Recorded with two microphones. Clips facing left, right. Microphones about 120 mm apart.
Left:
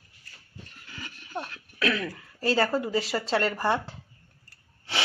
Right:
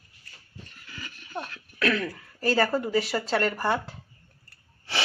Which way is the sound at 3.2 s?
30° left (ahead or behind).